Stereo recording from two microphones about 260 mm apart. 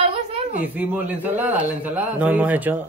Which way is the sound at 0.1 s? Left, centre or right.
Right.